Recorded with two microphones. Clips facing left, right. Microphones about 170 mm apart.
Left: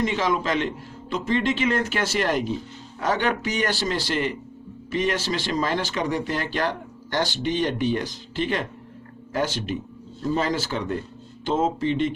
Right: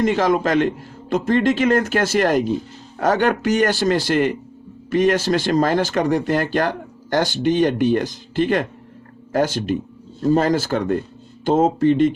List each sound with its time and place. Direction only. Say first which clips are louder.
0.0 s speech: right 6 dB; 50° right (ahead or behind)